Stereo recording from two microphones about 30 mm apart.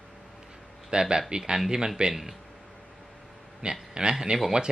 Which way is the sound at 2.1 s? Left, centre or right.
Centre.